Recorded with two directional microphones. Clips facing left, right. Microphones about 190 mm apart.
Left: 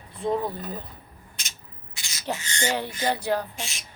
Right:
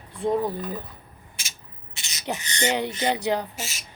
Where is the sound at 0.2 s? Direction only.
15° right (ahead or behind).